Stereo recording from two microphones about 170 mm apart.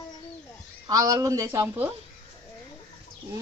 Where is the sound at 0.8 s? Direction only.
20° right (ahead or behind).